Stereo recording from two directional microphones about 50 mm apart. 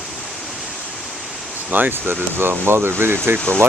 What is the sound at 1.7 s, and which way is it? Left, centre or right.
Speech, right.